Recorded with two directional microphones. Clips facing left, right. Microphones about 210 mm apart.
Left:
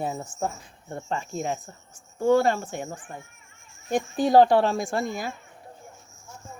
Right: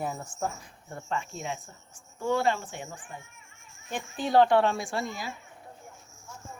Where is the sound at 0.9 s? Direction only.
35° left (ahead or behind); by 5.3 s 50° left (ahead or behind).